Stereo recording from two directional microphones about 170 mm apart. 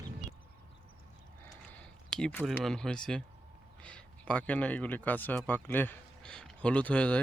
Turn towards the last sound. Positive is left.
turn(degrees=10)  # may be behind; listen again after turning